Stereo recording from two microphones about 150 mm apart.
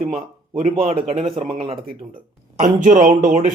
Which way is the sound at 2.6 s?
60° right (ahead or behind).